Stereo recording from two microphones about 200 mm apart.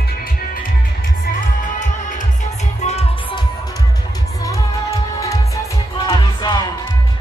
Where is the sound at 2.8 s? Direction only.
30° left (ahead or behind).